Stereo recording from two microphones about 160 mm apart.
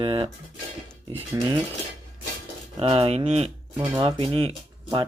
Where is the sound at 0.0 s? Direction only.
30° right (ahead or behind).